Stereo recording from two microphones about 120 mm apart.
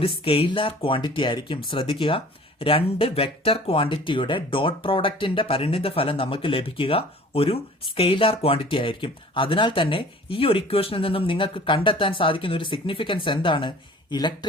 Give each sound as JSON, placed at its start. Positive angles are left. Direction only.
{"t": 0.0, "sound": "speech", "side_deg": 50}